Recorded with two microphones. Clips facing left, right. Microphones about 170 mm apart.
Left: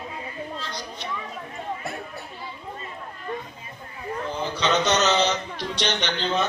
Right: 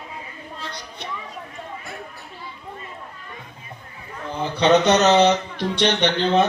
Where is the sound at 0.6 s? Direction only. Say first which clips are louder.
Left 1 dB; 60° right (ahead or behind).